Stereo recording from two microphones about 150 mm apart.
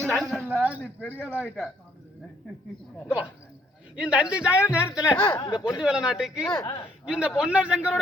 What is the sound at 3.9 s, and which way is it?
Speech, 5° right (ahead or behind).